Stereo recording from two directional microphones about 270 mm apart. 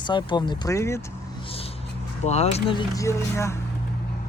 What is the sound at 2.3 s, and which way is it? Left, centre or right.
Speech, left.